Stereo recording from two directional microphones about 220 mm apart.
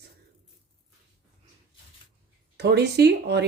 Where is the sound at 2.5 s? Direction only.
50° right (ahead or behind).